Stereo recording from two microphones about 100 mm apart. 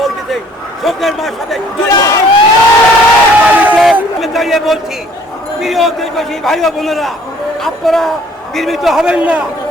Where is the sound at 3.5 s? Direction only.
15° right (ahead or behind).